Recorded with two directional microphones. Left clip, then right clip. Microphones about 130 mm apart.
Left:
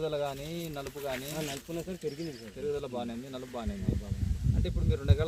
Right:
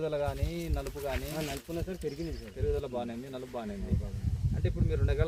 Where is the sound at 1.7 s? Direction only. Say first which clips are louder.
Even; 15° left (ahead or behind).